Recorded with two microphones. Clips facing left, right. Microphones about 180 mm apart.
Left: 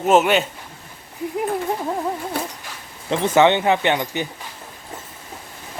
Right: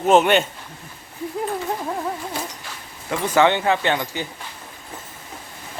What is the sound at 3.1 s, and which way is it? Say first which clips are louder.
Speech: left 2 dB; 25° left (ahead or behind).